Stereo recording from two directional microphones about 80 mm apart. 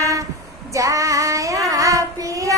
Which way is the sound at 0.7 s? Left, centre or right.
Right.